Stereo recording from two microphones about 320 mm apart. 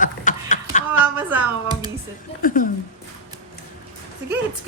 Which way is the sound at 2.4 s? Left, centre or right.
Left.